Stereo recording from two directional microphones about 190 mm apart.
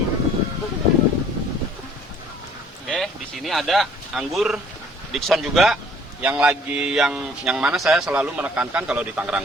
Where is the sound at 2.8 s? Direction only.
Centre (ahead or behind).